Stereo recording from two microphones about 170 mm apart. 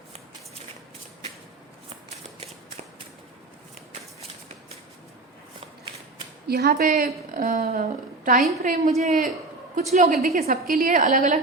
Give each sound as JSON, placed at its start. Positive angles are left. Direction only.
{"t": 6.5, "sound": "a woman's voice", "side_deg": -65}